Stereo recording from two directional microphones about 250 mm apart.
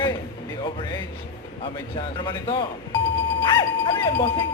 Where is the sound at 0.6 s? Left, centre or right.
Centre.